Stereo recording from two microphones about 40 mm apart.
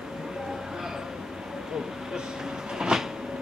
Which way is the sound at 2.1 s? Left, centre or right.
Centre.